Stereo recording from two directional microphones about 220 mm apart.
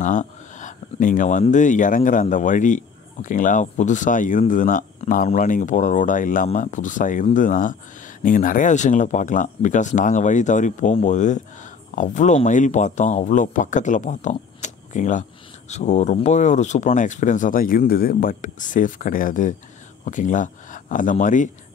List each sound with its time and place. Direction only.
0.0 s speech: 35° left (ahead or behind)